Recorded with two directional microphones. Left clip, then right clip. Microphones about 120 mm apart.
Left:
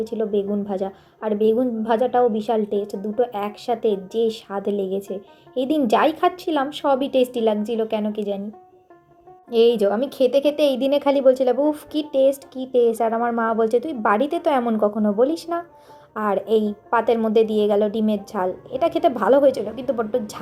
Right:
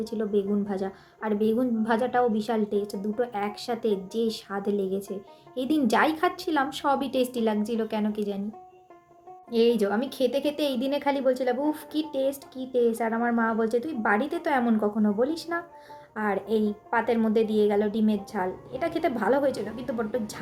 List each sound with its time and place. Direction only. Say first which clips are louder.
0.0 s a woman's voice: left 5 dB; 5° left (ahead or behind)
9.5 s speech: left 6 dB; 10° left (ahead or behind)
13.1 s a woman's voice: left 5 dB; 5° right (ahead or behind)
15.5 s speech: left 5 dB; 20° right (ahead or behind)
16.9 s speech: left 7 dB; 10° left (ahead or behind)